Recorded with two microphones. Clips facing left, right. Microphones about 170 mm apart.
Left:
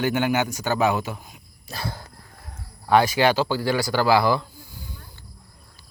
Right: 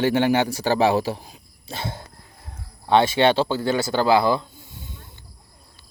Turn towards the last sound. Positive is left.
turn(degrees=-25)  # may be behind; listen again after turning